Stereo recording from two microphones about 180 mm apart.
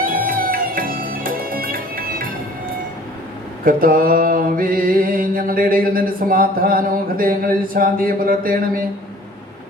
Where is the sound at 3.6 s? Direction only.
50° right (ahead or behind).